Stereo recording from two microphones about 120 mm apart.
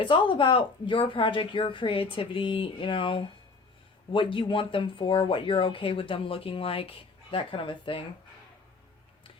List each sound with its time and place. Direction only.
0.0 s speech: 45° left (ahead or behind)